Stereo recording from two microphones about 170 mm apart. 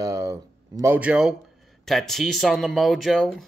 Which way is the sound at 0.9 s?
5° right (ahead or behind).